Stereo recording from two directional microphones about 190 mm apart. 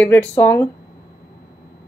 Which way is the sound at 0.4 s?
10° left (ahead or behind).